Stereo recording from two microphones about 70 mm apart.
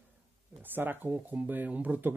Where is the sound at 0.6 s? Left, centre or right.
Right.